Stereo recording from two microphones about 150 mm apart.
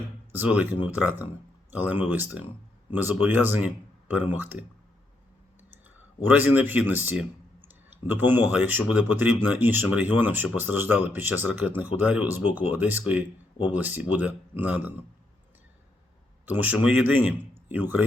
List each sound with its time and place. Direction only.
0.3 s speech: 10° right (ahead or behind)
6.2 s speech: 10° right (ahead or behind)
16.5 s speech: 10° right (ahead or behind)